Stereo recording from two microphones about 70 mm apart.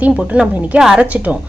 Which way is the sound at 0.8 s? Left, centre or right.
Centre.